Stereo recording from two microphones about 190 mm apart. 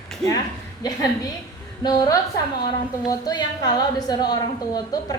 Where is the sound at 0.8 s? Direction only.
20° left (ahead or behind).